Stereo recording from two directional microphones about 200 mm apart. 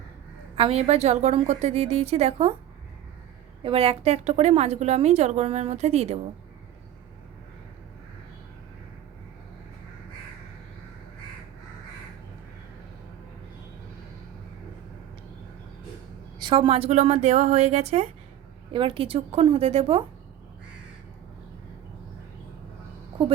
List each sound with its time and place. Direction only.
0.5 s a woman's voice: 30° right (ahead or behind)
3.6 s a woman's voice: 30° right (ahead or behind)
16.4 s a woman's voice: 25° right (ahead or behind)